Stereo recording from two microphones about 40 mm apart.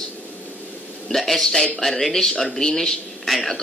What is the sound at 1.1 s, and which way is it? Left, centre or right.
Speech, centre.